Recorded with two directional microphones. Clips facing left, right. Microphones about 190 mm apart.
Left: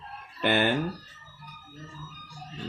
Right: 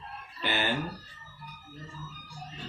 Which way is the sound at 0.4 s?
55° left (ahead or behind).